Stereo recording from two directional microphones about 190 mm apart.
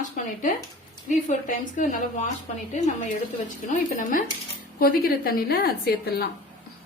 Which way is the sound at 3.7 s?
45° left (ahead or behind).